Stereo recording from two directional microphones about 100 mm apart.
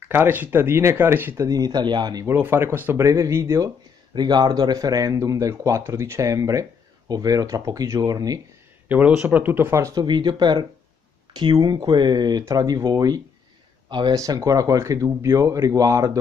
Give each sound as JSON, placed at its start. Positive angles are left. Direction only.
{"t": 0.1, "sound": "speech", "side_deg": -20}
{"t": 2.2, "sound": "speech", "side_deg": -25}
{"t": 3.0, "sound": "speech", "side_deg": -30}
{"t": 4.1, "sound": "speech", "side_deg": -45}
{"t": 8.8, "sound": "speech", "side_deg": -15}
{"t": 10.0, "sound": "speech", "side_deg": -50}
{"t": 11.6, "sound": "speech", "side_deg": -50}
{"t": 13.8, "sound": "speech", "side_deg": -50}
{"t": 14.1, "sound": "speech", "side_deg": -35}